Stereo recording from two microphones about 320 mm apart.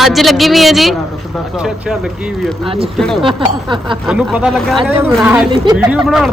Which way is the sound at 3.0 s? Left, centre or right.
Centre.